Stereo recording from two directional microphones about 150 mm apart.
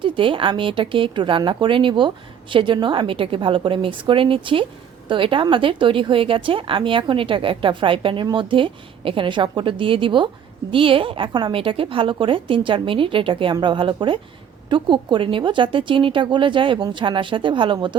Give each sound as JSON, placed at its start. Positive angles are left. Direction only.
{"t": 0.0, "sound": "speech", "side_deg": -35}